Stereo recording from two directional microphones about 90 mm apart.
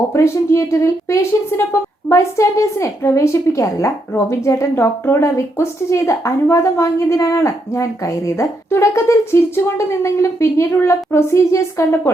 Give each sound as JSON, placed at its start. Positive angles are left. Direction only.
{"t": 0.1, "sound": "a woman's voice", "side_deg": 35}